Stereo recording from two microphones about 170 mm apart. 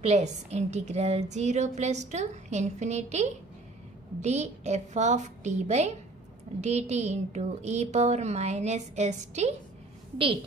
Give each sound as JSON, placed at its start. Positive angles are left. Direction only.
{"t": 0.0, "sound": "a woman's voice", "side_deg": -40}